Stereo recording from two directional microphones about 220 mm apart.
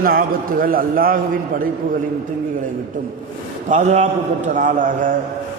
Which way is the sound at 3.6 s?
35° right (ahead or behind).